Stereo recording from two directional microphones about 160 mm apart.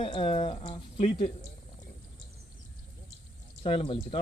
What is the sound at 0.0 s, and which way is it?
Speech, 35° left (ahead or behind).